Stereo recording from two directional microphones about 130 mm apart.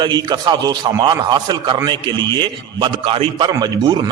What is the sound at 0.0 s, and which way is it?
A man's voice, 35° right (ahead or behind).